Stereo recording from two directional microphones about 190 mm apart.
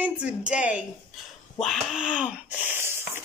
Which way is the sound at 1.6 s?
Centre (ahead or behind).